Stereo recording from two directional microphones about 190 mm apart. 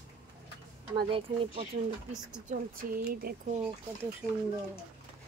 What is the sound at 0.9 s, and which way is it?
Speech, 30° right (ahead or behind).